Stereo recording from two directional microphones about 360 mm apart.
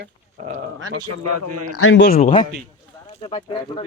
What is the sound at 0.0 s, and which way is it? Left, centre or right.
Speech, right.